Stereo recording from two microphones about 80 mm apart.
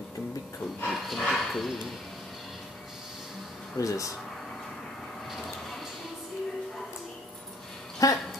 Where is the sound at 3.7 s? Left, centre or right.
Left.